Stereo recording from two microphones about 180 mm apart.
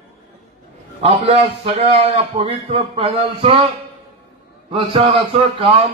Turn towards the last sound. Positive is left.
turn(degrees=-30)  # may be behind; listen again after turning